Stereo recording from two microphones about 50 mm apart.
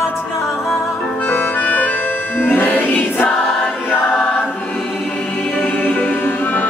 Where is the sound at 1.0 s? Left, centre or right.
Left.